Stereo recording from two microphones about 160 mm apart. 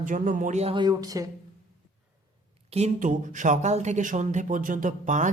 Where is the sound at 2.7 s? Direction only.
50° right (ahead or behind).